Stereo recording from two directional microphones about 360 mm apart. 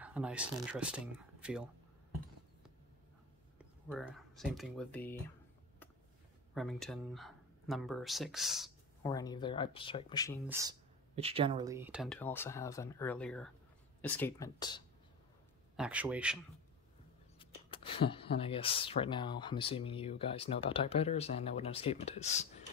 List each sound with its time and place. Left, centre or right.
0.0 s speech: centre
3.9 s speech: centre
6.5 s speech: centre
9.0 s speech: centre
10.4 s speech: centre
15.7 s speech: centre
17.4 s speech: centre